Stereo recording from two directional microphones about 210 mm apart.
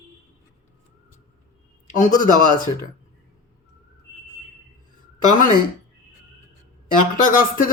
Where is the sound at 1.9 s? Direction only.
40° left (ahead or behind).